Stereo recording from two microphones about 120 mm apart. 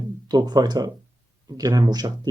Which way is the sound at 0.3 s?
35° right (ahead or behind).